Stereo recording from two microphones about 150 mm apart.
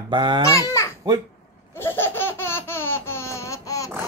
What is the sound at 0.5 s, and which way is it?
Speech, 20° left (ahead or behind).